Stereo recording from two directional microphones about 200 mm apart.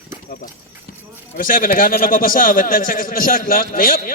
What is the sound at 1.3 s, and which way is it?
A man's voice, 45° left (ahead or behind).